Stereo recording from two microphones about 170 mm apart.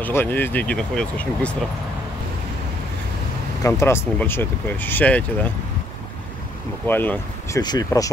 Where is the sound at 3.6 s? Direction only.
20° left (ahead or behind).